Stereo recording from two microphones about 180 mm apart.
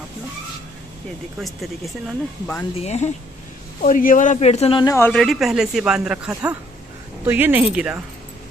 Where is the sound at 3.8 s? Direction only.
50° left (ahead or behind).